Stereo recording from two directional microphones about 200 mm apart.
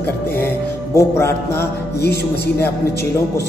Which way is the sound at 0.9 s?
15° left (ahead or behind).